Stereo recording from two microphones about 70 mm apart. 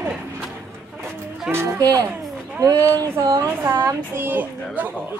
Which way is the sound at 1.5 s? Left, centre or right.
Centre.